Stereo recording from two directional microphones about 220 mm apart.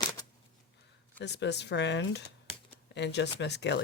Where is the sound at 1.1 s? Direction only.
50° left (ahead or behind).